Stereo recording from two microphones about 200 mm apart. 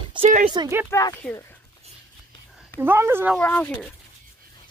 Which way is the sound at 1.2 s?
Centre (ahead or behind).